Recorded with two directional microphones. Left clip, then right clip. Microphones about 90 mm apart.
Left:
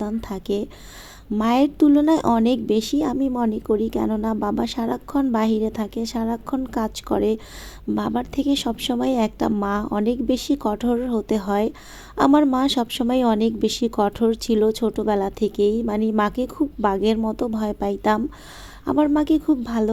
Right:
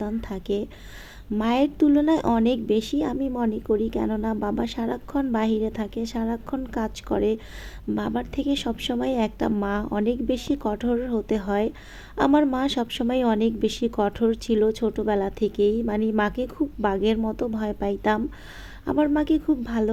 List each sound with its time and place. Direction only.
0.0 s a woman's voice: 30° left (ahead or behind)